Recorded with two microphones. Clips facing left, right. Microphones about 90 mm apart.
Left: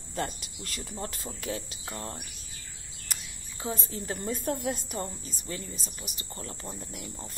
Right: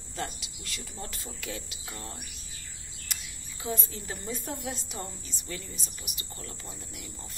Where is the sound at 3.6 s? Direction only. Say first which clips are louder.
Left 1 dB; 35° left (ahead or behind).